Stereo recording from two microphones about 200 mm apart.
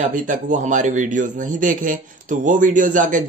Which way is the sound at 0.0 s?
40° right (ahead or behind).